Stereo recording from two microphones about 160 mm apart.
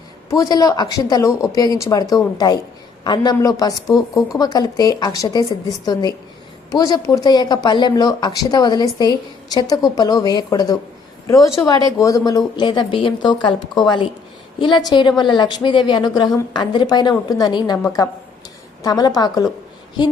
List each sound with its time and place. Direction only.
0.3 s speech: 25° left (ahead or behind)